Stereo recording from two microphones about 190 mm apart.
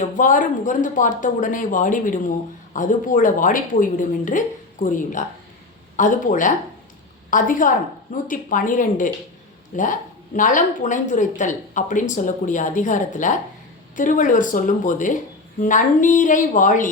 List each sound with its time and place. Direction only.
0.0 s a woman's voice: 45° left (ahead or behind)